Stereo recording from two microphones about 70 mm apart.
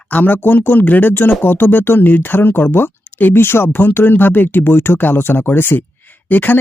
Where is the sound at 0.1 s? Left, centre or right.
Left.